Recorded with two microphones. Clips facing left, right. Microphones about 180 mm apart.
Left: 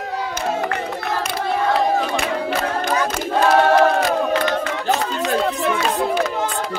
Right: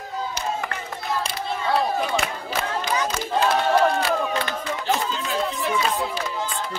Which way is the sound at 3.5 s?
65° left (ahead or behind).